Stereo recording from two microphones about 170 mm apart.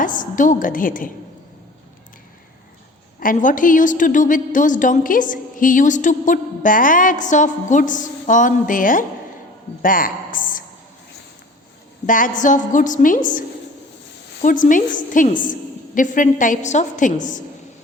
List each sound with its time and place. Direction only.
0.0 s a woman's voice: 50° left (ahead or behind)
3.2 s a woman's voice: 50° left (ahead or behind)
9.8 s a sound: 55° left (ahead or behind)
12.0 s a woman's voice: 50° left (ahead or behind)
14.4 s a woman's voice: 50° left (ahead or behind)